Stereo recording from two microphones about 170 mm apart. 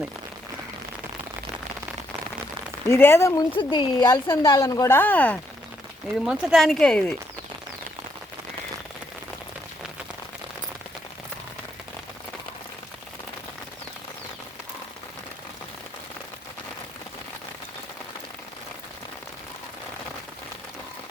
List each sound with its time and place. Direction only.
2.9 s speech: 15° left (ahead or behind)
3.5 s speech: 25° left (ahead or behind); by 5.4 s 10° left (ahead or behind)
6.1 s speech: 5° right (ahead or behind)